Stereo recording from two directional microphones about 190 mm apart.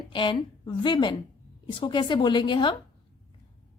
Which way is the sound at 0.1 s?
25° left (ahead or behind).